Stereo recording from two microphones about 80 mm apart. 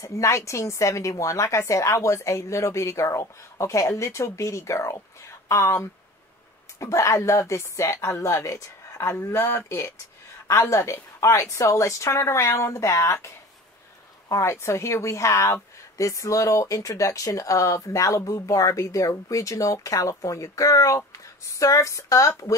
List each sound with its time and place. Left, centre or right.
0.0 s a woman's voice: left
9.1 s a woman's voice: left
14.3 s a woman's voice: left